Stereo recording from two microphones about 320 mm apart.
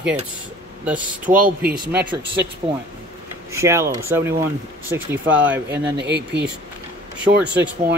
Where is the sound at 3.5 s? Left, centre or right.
Centre.